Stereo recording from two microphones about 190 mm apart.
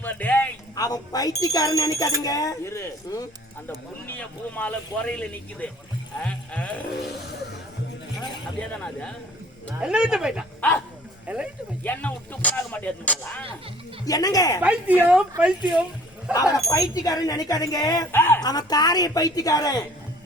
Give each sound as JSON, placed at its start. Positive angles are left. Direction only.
{"t": 0.0, "sound": "a woman's voice", "side_deg": 10}
{"t": 8.8, "sound": "a woman's voice", "side_deg": 5}
{"t": 9.8, "sound": "a woman's voice", "side_deg": -5}
{"t": 11.3, "sound": "a woman's voice", "side_deg": -5}
{"t": 11.8, "sound": "speech", "side_deg": 10}
{"t": 14.0, "sound": "a woman's voice", "side_deg": 20}
{"t": 14.6, "sound": "a woman's voice", "side_deg": -5}
{"t": 16.3, "sound": "a woman's voice", "side_deg": 20}